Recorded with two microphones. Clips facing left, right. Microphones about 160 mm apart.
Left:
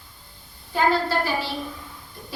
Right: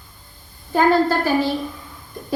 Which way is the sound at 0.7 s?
45° right (ahead or behind).